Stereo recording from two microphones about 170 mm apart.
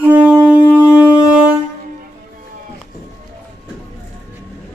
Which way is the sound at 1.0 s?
20° left (ahead or behind).